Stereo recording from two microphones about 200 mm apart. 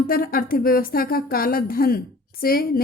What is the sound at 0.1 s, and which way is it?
Speech, 45° left (ahead or behind).